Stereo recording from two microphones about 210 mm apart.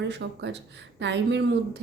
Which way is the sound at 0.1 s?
55° right (ahead or behind).